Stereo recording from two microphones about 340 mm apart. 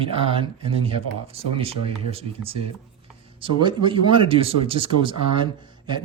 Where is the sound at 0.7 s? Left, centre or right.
Centre.